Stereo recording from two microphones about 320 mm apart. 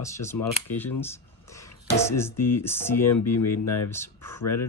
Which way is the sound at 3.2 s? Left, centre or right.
Left.